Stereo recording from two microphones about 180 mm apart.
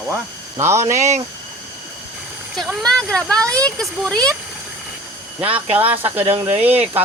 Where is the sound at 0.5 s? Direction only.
15° right (ahead or behind).